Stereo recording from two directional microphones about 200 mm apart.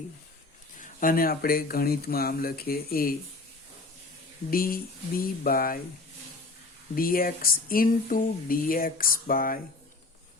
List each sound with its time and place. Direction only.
0.8 s speech: 40° left (ahead or behind)
4.5 s speech: 45° left (ahead or behind)
6.9 s speech: 45° left (ahead or behind)